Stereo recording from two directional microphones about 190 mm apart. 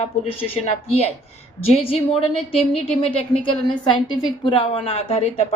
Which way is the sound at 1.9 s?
30° left (ahead or behind).